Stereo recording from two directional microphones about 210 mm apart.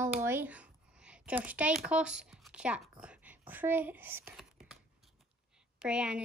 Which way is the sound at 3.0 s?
5° right (ahead or behind).